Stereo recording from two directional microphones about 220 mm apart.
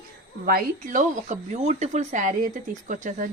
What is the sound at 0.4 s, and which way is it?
Speech, 40° right (ahead or behind).